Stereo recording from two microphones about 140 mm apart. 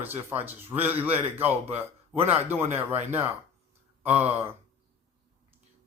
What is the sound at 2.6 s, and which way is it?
Speech, 55° right (ahead or behind).